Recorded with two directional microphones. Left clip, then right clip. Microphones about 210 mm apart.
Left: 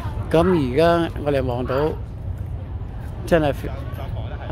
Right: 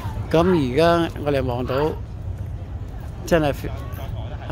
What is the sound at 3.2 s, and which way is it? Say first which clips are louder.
Speech: left 1 dB; 5° right (ahead or behind).